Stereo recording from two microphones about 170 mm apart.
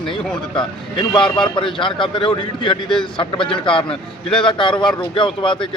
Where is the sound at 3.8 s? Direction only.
5° left (ahead or behind).